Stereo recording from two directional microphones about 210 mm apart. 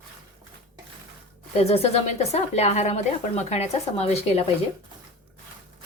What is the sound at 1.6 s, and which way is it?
Speech, 30° left (ahead or behind).